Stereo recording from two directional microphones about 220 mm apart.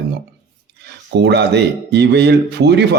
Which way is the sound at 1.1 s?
50° right (ahead or behind).